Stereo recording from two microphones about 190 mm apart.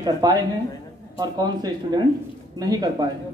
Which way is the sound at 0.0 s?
20° right (ahead or behind).